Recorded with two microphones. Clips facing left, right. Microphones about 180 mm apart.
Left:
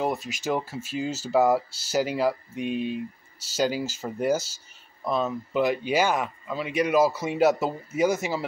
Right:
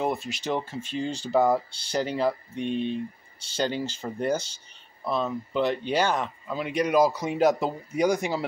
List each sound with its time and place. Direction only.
0.0 s speech: 5° left (ahead or behind)